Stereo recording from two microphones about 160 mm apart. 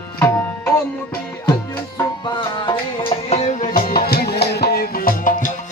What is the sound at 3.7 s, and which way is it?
Music, 65° left (ahead or behind).